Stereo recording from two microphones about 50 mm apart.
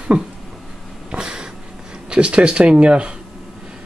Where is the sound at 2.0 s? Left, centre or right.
Right.